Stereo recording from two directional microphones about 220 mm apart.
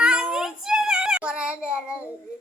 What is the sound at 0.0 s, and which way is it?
Child singing, 5° right (ahead or behind).